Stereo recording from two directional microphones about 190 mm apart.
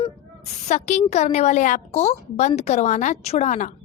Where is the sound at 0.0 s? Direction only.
35° left (ahead or behind).